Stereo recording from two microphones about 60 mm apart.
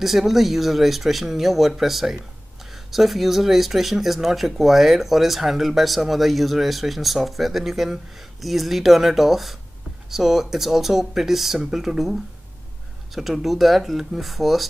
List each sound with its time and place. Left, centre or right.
0.0 s speech: centre